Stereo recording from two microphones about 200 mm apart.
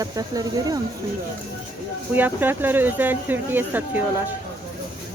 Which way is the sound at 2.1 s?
10° right (ahead or behind).